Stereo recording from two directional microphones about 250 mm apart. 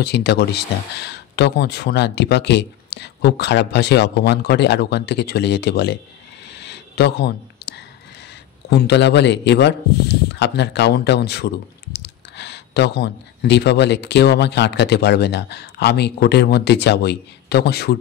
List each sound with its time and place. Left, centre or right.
0.0 s speech: left
6.5 s a sound: left
8.6 s speech: left